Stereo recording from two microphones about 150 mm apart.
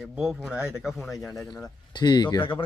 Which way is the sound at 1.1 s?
20° left (ahead or behind).